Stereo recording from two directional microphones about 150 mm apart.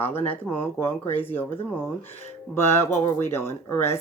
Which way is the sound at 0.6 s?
15° left (ahead or behind).